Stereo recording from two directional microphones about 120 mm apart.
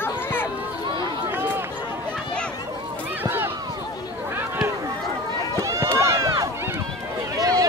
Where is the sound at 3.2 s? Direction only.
15° right (ahead or behind).